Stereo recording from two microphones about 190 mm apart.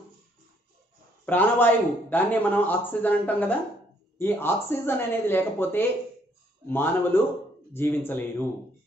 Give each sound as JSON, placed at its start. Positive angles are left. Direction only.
{"t": 1.2, "sound": "a man's voice", "side_deg": 10}